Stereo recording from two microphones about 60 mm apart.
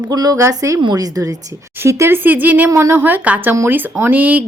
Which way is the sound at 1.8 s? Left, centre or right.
Right.